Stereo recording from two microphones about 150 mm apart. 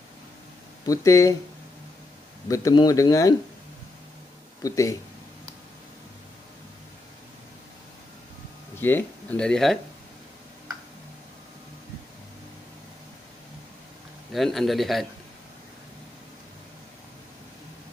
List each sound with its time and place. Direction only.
0.8 s speech: 20° left (ahead or behind)
2.4 s speech: 20° left (ahead or behind)
4.6 s speech: 20° left (ahead or behind)
8.7 s speech: 15° left (ahead or behind)
14.3 s speech: centre (ahead or behind)